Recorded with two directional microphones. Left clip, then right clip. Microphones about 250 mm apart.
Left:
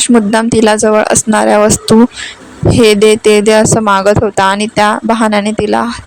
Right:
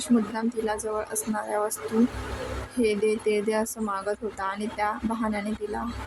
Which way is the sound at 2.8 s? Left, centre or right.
Left.